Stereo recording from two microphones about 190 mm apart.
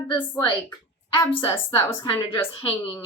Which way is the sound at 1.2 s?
15° left (ahead or behind).